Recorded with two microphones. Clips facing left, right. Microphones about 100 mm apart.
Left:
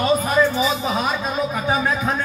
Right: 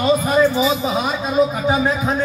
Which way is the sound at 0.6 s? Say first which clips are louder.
Right 2 dB; 25° right (ahead or behind).